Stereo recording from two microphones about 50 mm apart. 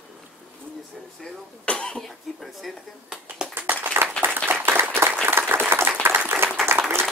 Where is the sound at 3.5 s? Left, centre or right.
Right.